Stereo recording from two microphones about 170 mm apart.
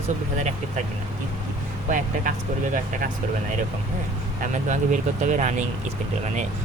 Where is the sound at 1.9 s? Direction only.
50° right (ahead or behind).